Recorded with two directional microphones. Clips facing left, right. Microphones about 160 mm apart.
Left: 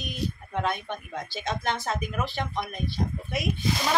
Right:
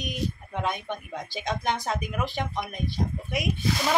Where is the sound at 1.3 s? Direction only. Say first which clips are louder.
Right 2 dB; 15° right (ahead or behind).